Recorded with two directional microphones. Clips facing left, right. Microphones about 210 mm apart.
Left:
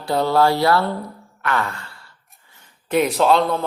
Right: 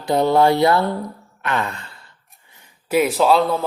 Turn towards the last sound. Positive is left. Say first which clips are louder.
# right 1 dB
turn(degrees=0)  # may be behind; listen again after turning